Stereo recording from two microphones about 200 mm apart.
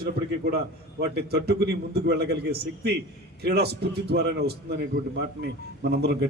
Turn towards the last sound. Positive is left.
turn(degrees=-55)  # may be behind; listen again after turning